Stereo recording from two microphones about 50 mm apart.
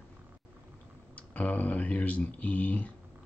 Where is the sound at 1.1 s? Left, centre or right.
Left.